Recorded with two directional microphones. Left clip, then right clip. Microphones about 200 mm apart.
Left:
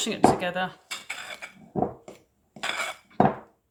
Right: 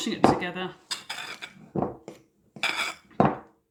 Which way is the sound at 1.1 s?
15° right (ahead or behind).